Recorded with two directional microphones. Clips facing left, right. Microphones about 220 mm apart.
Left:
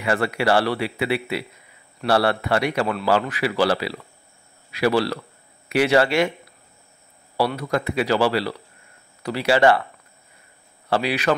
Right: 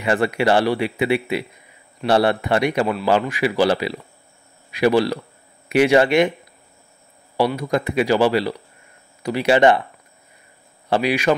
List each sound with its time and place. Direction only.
0.0 s speech: 20° right (ahead or behind)
7.3 s speech: 15° right (ahead or behind)
10.9 s speech: 15° right (ahead or behind)